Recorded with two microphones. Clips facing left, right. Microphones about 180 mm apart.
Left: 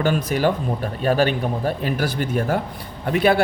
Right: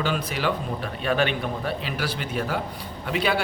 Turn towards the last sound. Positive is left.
turn(degrees=50)  # may be behind; listen again after turning